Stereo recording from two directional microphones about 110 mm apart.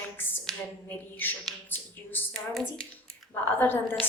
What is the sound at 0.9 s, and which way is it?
Speech, 15° left (ahead or behind).